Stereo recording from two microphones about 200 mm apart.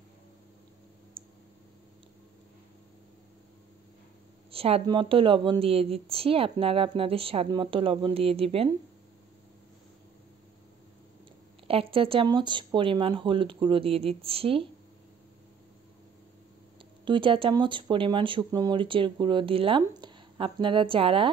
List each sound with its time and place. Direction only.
1.2 s a sound: 25° right (ahead or behind)
4.5 s speech: 30° right (ahead or behind)
11.6 s speech: 30° right (ahead or behind)
17.0 s speech: 25° right (ahead or behind)